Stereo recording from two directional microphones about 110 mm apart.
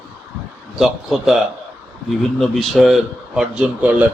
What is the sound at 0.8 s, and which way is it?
Speech, 5° right (ahead or behind).